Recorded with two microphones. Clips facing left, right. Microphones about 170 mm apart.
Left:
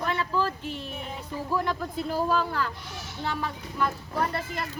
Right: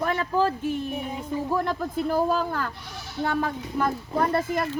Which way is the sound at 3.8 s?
45° right (ahead or behind).